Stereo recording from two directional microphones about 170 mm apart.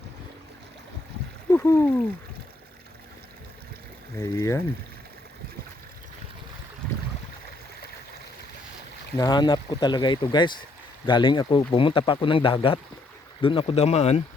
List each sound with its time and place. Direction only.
1.5 s a sound: 15° left (ahead or behind)
4.2 s speech: 20° left (ahead or behind)
9.1 s speech: 25° left (ahead or behind)